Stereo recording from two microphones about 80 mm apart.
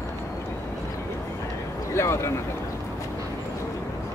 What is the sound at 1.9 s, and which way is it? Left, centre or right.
Speech, left.